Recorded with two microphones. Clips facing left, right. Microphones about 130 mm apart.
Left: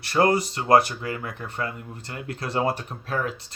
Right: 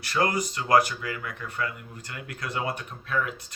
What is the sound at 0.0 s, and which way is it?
Speech, 30° left (ahead or behind).